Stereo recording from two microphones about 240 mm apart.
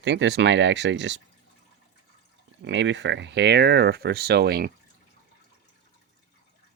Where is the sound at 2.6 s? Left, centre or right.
Right.